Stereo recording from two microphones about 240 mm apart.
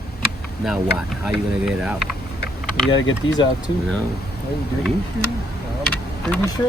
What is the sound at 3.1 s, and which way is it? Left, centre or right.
Speech, left.